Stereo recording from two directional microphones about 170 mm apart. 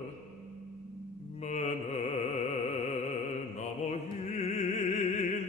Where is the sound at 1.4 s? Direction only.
40° left (ahead or behind).